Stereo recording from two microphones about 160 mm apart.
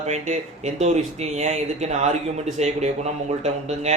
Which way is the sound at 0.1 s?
45° right (ahead or behind).